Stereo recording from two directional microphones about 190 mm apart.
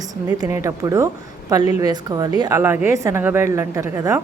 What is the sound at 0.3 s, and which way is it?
A woman's voice, 15° right (ahead or behind).